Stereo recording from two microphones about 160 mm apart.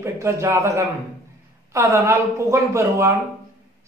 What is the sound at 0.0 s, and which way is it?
A man's voice, 15° right (ahead or behind).